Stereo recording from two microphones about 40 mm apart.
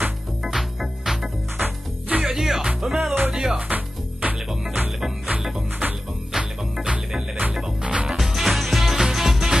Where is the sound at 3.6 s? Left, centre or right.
Right.